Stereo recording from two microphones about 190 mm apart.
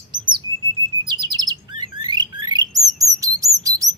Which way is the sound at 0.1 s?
25° right (ahead or behind).